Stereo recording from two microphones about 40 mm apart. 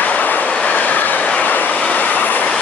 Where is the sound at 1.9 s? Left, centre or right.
Left.